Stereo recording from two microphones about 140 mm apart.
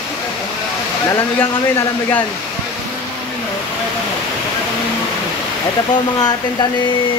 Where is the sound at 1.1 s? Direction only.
20° left (ahead or behind).